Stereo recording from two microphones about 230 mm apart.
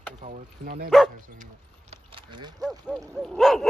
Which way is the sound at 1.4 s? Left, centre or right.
Right.